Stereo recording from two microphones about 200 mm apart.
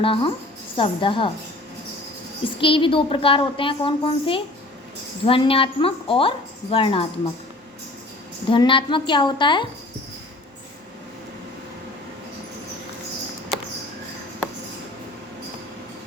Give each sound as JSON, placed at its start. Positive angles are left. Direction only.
{"t": 0.0, "sound": "a woman's voice", "side_deg": 25}
{"t": 2.6, "sound": "a woman's voice", "side_deg": 25}
{"t": 8.4, "sound": "a woman's voice", "side_deg": 25}